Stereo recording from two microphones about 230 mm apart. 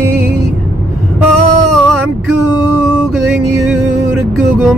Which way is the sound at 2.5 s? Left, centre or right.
Centre.